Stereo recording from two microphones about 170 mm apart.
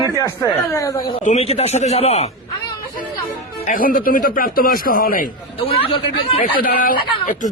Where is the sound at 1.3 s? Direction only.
35° left (ahead or behind).